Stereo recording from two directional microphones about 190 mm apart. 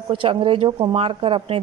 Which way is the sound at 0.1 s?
25° right (ahead or behind).